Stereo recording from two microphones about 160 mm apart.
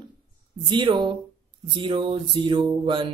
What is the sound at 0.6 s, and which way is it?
Speech, 30° right (ahead or behind).